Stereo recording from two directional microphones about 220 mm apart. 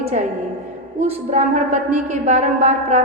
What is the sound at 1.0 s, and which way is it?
A woman's voice, 30° right (ahead or behind).